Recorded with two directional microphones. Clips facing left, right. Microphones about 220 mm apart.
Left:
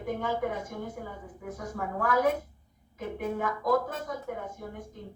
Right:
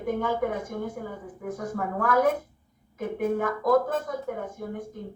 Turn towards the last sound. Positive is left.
turn(degrees=-50)  # may be behind; listen again after turning